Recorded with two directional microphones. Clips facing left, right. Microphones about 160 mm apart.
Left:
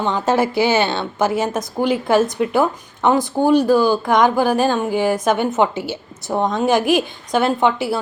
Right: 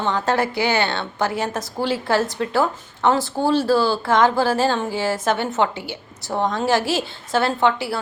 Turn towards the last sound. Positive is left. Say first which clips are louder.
# left 3 dB
turn(degrees=20)  # may be behind; listen again after turning